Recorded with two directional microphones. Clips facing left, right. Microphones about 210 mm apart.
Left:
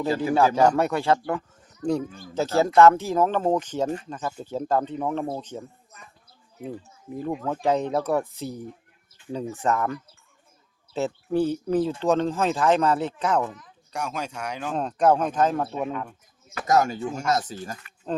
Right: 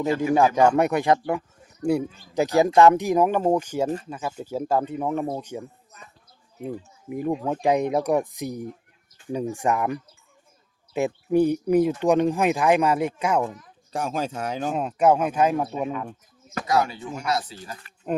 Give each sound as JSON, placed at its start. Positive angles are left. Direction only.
{"t": 0.3, "sound": "a man's voice", "side_deg": -15}
{"t": 7.1, "sound": "speech", "side_deg": -15}
{"t": 13.6, "sound": "speech", "side_deg": -35}
{"t": 14.7, "sound": "speech", "side_deg": -5}
{"t": 16.6, "sound": "speech", "side_deg": 45}
{"t": 18.1, "sound": "speech", "side_deg": -15}